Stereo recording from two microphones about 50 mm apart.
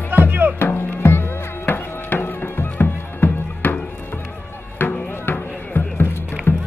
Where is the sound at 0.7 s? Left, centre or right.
Left.